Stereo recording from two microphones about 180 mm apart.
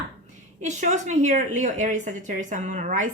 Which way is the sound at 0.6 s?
40° right (ahead or behind).